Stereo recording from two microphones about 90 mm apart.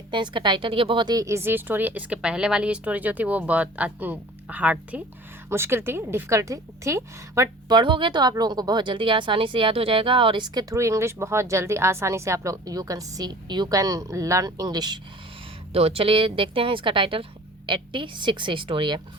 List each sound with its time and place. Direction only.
0.1 s a woman's voice: 60° right (ahead or behind)
1.0 s a woman's voice: 40° right (ahead or behind)
1.4 s speech: 25° right (ahead or behind)
5.5 s a woman's voice: 25° right (ahead or behind)
7.7 s a woman's voice: 60° right (ahead or behind)
10.8 s a woman's voice: 35° right (ahead or behind); by 14.9 s 50° right (ahead or behind)
15.8 s a woman's voice: 90° right; by 17.2 s 75° right (ahead or behind)
17.7 s a woman's voice: 60° right (ahead or behind)